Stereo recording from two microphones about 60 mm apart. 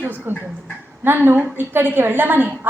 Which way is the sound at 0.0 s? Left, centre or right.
Right.